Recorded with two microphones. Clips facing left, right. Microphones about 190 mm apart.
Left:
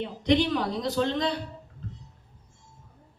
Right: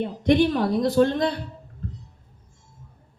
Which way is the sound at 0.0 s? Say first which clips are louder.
Right 5 dB; 55° right (ahead or behind).